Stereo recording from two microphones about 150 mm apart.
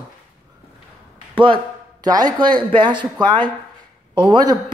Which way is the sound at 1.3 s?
35° right (ahead or behind).